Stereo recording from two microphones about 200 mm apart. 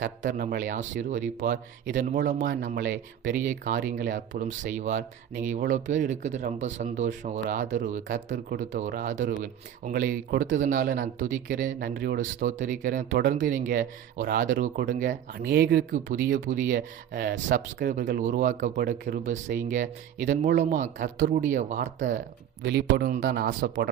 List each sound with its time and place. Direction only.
0.0 s speech: 40° right (ahead or behind)
1.4 s speech: 60° right (ahead or behind)
2.0 s speech: 40° right (ahead or behind)
13.1 s speech: 55° right (ahead or behind)
13.3 s speech: 40° right (ahead or behind)
15.1 s speech: 55° right (ahead or behind)
22.6 s speech: 55° right (ahead or behind)